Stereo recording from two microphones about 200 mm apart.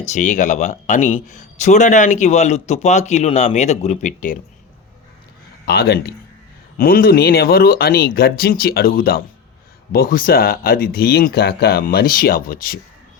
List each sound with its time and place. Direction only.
0.0 s speech: 35° left (ahead or behind)
5.6 s speech: 50° left (ahead or behind)